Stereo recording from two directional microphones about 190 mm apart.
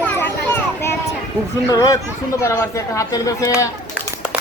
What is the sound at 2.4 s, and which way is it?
Speech, 15° left (ahead or behind).